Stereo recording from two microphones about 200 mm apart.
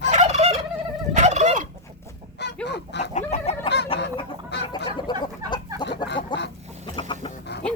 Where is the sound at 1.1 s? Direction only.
35° right (ahead or behind).